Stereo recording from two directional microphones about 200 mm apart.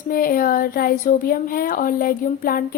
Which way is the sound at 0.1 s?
45° left (ahead or behind).